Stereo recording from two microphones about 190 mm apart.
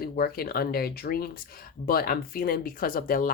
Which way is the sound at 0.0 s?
50° left (ahead or behind).